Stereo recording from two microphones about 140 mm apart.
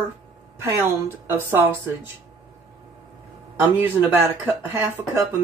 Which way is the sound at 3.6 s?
15° right (ahead or behind).